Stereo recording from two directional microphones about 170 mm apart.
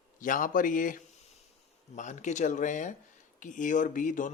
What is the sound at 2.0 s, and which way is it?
Speech, 45° left (ahead or behind).